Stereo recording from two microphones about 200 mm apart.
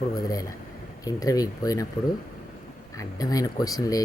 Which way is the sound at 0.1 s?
15° left (ahead or behind).